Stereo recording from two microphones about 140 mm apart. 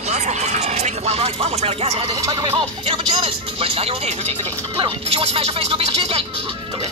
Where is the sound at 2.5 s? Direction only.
40° right (ahead or behind).